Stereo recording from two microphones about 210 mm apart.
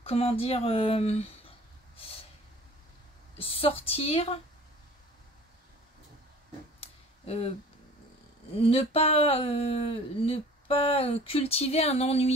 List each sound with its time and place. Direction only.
0.0 s speech: 30° left (ahead or behind)
3.3 s speech: 25° left (ahead or behind)
6.8 s a sound: 30° left (ahead or behind)
8.6 s speech: 30° left (ahead or behind)